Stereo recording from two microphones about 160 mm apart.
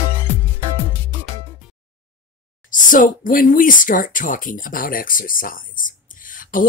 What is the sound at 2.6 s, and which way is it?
Speech, 55° left (ahead or behind).